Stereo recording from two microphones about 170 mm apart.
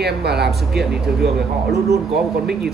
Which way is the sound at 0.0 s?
70° right (ahead or behind).